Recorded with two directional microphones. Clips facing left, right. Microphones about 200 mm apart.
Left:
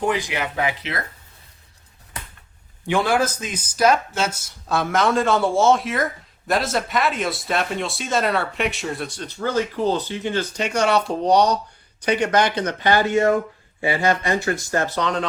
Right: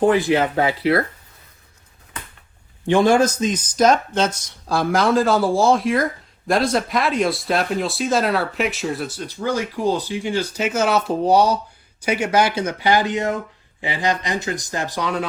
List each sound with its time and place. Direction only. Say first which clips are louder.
0.1 s speech: right 7 dB; 15° left (ahead or behind)
3.3 s speech: right 8 dB; 10° left (ahead or behind); by 15.3 s 10° right (ahead or behind)